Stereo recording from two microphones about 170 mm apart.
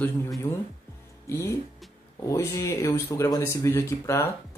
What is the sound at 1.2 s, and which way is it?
Speech, 15° left (ahead or behind).